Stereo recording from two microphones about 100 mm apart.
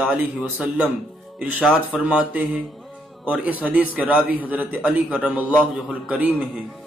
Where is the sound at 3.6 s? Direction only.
15° right (ahead or behind).